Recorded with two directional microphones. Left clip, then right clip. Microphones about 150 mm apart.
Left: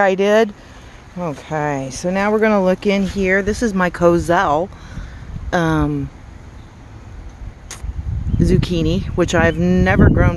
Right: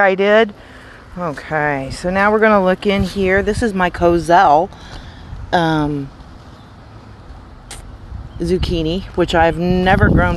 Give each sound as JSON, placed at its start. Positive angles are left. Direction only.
{"t": 0.0, "sound": "speech", "side_deg": 15}
{"t": 4.3, "sound": "speech", "side_deg": 15}
{"t": 8.4, "sound": "speech", "side_deg": 35}
{"t": 9.8, "sound": "speech", "side_deg": 15}